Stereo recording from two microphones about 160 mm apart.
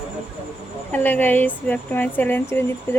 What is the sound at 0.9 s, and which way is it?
Speech, 10° left (ahead or behind).